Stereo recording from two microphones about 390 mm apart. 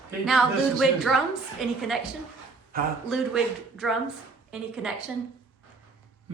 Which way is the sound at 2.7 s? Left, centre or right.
Right.